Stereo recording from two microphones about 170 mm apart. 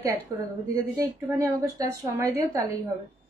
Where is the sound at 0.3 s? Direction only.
20° right (ahead or behind).